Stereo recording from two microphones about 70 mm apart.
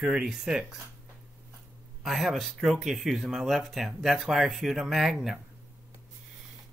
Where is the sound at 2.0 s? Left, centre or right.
Centre.